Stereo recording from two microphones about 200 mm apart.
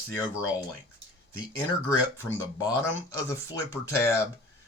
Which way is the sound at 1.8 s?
10° left (ahead or behind).